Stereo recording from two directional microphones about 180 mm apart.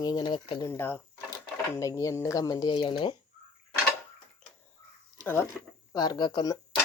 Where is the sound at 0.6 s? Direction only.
10° left (ahead or behind).